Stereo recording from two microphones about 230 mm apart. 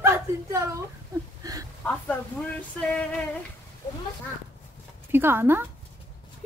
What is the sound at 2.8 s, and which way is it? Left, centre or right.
Speech, centre.